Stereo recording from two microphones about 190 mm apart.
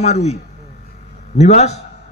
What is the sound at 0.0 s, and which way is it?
A man's voice, 35° left (ahead or behind).